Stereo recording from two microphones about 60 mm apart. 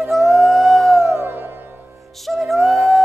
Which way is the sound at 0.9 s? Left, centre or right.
Right.